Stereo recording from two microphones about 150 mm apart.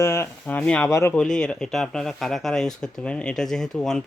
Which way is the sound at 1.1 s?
5° left (ahead or behind).